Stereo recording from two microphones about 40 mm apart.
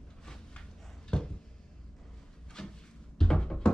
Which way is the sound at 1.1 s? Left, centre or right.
Left.